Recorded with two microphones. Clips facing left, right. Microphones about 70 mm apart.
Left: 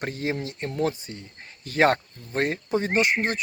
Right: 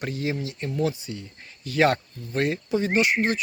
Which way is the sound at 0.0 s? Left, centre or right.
Left.